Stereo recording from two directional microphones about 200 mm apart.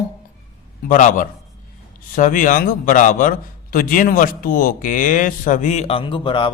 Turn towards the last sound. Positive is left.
turn(degrees=25)  # may be behind; listen again after turning